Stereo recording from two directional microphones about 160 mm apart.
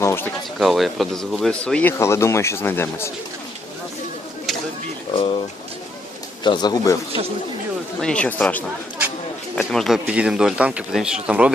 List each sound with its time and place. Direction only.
0.0 s a sound: 15° left (ahead or behind)
0.6 s speech: centre (ahead or behind)
5.1 s speech: 35° left (ahead or behind)
6.4 s speech: 25° left (ahead or behind)
8.0 s speech: 5° left (ahead or behind)